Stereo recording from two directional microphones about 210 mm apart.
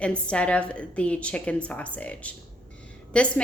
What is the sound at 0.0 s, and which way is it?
Speech, 5° left (ahead or behind).